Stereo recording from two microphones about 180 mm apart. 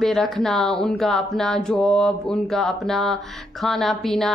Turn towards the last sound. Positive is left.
turn(degrees=0)  # may be behind; listen again after turning